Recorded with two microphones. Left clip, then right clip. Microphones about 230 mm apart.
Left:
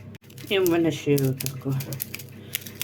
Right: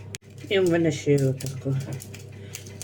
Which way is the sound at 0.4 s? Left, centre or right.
Centre.